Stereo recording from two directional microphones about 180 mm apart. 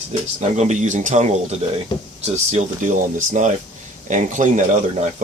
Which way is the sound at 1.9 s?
25° left (ahead or behind).